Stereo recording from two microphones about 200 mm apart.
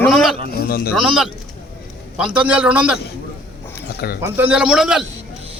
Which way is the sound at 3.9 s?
50° left (ahead or behind).